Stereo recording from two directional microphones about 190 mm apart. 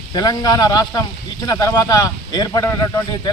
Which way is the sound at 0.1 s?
20° left (ahead or behind).